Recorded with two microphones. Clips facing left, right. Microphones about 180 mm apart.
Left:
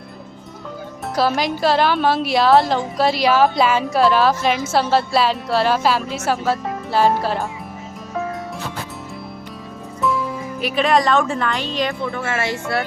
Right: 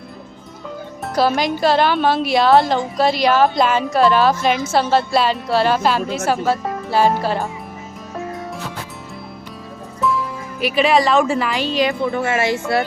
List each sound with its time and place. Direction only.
1.0 s speech: centre (ahead or behind)
10.6 s speech: 5° right (ahead or behind)
12.1 s speech: 15° right (ahead or behind)